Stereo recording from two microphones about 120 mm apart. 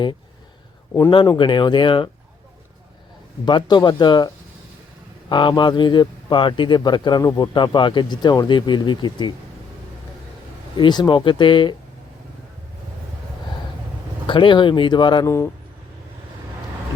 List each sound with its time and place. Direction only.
1.1 s speech: 40° left (ahead or behind)
3.4 s speech: 35° left (ahead or behind)
5.3 s speech: 40° left (ahead or behind)
10.8 s speech: 40° left (ahead or behind)
14.3 s speech: 45° left (ahead or behind)